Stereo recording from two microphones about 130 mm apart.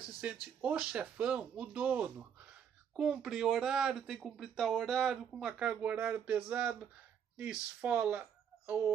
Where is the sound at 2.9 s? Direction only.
Centre (ahead or behind).